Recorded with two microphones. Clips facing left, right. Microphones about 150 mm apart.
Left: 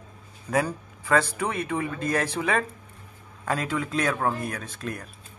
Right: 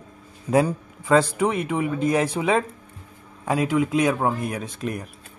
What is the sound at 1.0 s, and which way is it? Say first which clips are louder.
Speech: right 5 dB; 20° right (ahead or behind).